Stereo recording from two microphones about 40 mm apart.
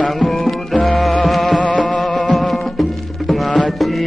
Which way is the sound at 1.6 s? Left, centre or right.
Left.